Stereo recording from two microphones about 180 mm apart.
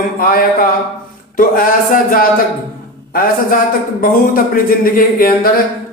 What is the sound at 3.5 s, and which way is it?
Speech, 50° left (ahead or behind).